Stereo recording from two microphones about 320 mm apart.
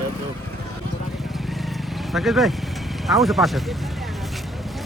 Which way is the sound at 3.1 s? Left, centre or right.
Centre.